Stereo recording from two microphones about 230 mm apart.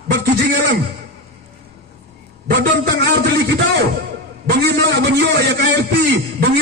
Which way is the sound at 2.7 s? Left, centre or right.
Right.